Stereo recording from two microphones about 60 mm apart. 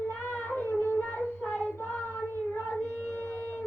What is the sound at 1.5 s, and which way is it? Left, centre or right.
Child singing, left.